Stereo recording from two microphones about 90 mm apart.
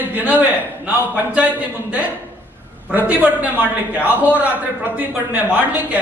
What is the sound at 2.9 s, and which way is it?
A man's voice, 15° right (ahead or behind).